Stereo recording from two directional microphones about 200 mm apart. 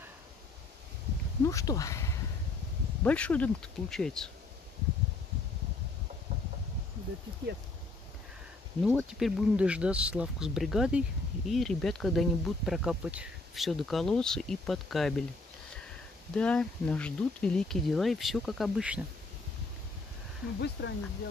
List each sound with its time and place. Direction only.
1.4 s speech: 15° left (ahead or behind)
8.8 s speech: 5° right (ahead or behind)
16.3 s speech: 5° left (ahead or behind)
20.8 s speech: 60° left (ahead or behind)